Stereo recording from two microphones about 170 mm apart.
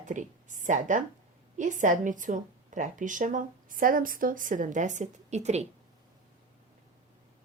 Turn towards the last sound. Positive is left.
turn(degrees=-40)  # may be behind; listen again after turning